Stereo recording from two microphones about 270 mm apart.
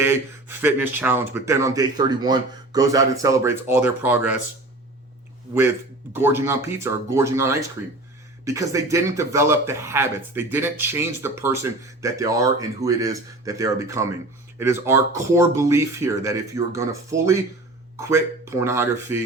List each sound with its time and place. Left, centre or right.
0.0 s speech: centre
6.1 s speech: centre